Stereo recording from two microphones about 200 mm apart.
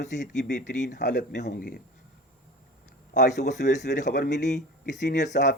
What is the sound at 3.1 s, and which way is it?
Speech, 40° left (ahead or behind).